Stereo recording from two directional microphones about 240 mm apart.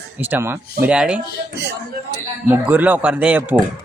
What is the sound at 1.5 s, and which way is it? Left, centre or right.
Speech, right.